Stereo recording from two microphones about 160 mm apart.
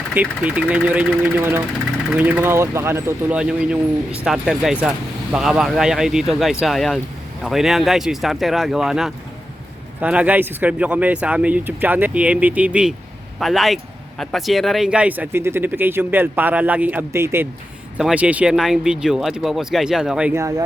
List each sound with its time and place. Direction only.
0.1 s speech: 10° right (ahead or behind)
20.3 s speech: 20° right (ahead or behind)